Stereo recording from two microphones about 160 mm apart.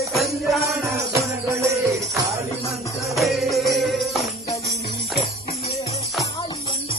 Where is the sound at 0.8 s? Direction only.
20° right (ahead or behind).